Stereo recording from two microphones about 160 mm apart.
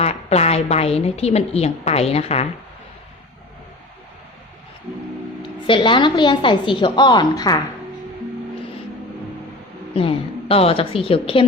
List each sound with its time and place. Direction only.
0.0 s a woman's voice: 40° left (ahead or behind)
5.4 s a woman's voice: 30° left (ahead or behind)
9.9 s a woman's voice: 35° left (ahead or behind)